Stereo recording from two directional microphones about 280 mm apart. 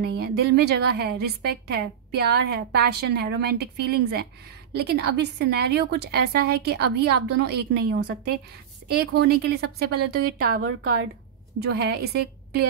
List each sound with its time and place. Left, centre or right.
0.0 s a woman's voice: right
10.6 s a woman's voice: right
11.6 s a woman's voice: right